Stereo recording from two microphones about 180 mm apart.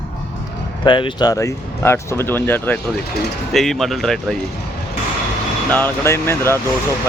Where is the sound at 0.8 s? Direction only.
25° left (ahead or behind); by 4.3 s centre (ahead or behind).